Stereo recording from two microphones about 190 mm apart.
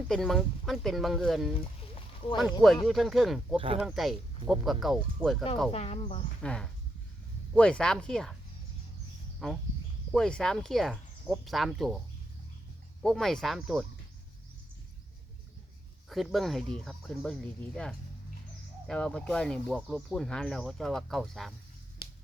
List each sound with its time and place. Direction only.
0.1 s speech: centre (ahead or behind)
5.7 s speech: 35° left (ahead or behind)
6.4 s speech: 5° left (ahead or behind)
9.4 s speech: 5° left (ahead or behind)
13.0 s speech: centre (ahead or behind)
16.0 s speech: centre (ahead or behind)